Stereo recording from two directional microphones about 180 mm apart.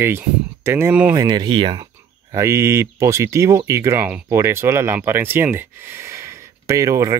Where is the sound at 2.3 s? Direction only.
15° right (ahead or behind).